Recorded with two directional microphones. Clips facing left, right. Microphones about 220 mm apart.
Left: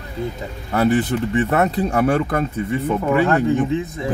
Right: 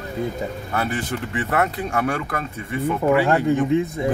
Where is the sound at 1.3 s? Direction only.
25° left (ahead or behind).